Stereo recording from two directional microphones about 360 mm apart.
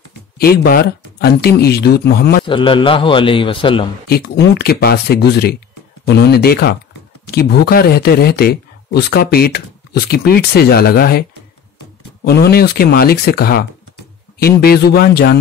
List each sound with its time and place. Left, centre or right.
0.4 s speech: left
2.4 s a man's voice: centre
4.1 s speech: left
12.3 s speech: left